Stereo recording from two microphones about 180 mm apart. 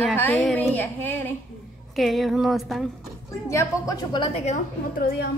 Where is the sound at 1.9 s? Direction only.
Centre (ahead or behind).